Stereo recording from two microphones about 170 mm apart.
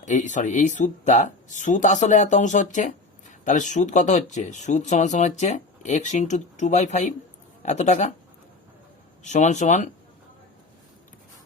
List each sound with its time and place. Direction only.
0.0 s speech: 45° left (ahead or behind)
9.2 s speech: 45° left (ahead or behind)